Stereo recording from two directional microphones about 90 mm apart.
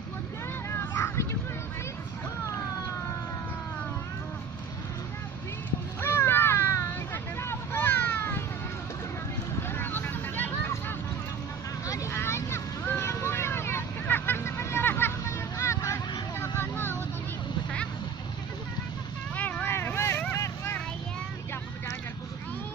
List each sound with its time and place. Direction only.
0.7 s a sound: 30° left (ahead or behind)
5.9 s a sound: 25° left (ahead or behind)
7.4 s vehicle: 25° left (ahead or behind)
9.6 s vehicle: 20° left (ahead or behind)
11.9 s vehicle: 35° left (ahead or behind)
19.3 s vehicle: 15° left (ahead or behind); by 20.7 s 35° left (ahead or behind)